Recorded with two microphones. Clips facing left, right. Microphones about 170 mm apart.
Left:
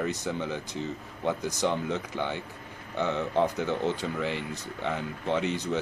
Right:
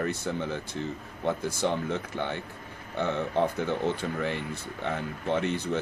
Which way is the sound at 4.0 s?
15° left (ahead or behind).